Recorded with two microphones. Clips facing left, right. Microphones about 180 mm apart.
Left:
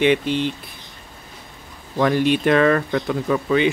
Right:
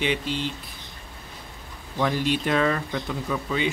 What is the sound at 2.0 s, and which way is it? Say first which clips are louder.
Speech: left 7 dB; 65° left (ahead or behind).